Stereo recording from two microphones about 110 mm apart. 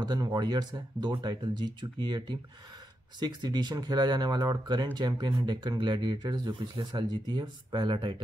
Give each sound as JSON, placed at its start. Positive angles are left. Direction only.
{"t": 0.0, "sound": "speech", "side_deg": -40}